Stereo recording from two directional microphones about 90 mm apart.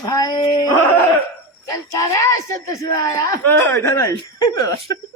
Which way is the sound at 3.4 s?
25° left (ahead or behind).